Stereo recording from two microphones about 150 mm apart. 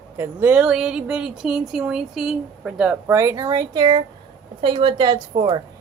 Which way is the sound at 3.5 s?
30° right (ahead or behind).